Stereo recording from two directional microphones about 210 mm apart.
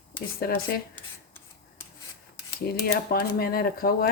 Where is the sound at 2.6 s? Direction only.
45° left (ahead or behind).